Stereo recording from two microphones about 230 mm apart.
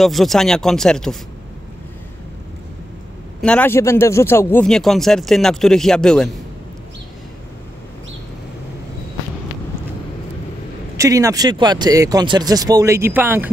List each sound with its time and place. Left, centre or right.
0.0 s a man's voice: centre
3.3 s a man's voice: centre
11.0 s speech: centre